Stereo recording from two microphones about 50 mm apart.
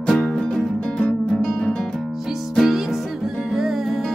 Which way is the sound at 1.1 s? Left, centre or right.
Left.